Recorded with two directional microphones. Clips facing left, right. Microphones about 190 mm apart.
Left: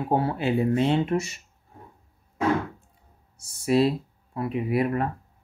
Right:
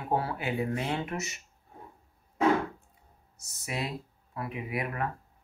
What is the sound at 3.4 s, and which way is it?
Speech, 30° left (ahead or behind).